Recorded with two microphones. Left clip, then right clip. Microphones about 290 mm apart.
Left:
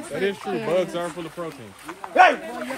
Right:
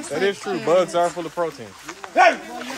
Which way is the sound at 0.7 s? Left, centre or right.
Right.